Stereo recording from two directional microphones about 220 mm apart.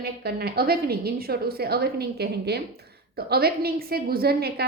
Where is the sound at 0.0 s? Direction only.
45° right (ahead or behind).